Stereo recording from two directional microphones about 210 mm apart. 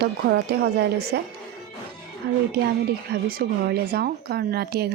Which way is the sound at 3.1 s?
45° right (ahead or behind).